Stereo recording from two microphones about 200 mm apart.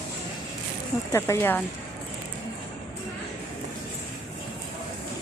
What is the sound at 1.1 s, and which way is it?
Speech, 15° left (ahead or behind).